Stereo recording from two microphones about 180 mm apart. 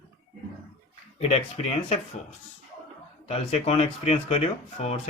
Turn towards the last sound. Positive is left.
turn(degrees=35)  # may be behind; listen again after turning